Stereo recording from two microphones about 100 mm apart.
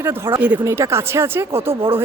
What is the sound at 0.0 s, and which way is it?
Speech, 25° right (ahead or behind).